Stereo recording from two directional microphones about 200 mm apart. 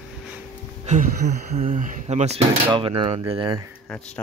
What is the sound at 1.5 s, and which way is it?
Speech, 40° right (ahead or behind).